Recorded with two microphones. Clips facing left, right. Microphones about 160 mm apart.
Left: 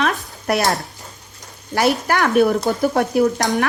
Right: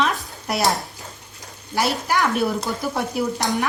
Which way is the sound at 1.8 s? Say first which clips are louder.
Left 4 dB; 60° left (ahead or behind).